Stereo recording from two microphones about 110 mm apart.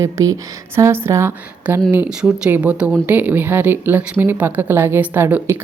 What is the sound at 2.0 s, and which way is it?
Speech, 10° right (ahead or behind).